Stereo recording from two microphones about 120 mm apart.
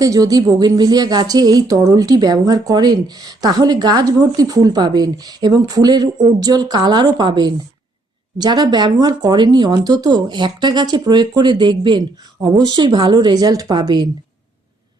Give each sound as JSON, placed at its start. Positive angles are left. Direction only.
{"t": 0.0, "sound": "speech", "side_deg": -30}